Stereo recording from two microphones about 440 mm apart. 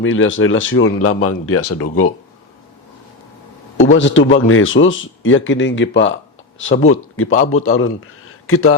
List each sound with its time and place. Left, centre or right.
0.0 s a man's voice: left
3.8 s a man's voice: left